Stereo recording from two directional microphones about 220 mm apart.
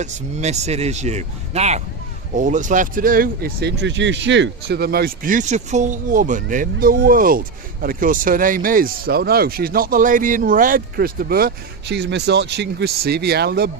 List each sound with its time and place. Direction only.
0.0 s speech: 30° right (ahead or behind); by 13.7 s 45° right (ahead or behind)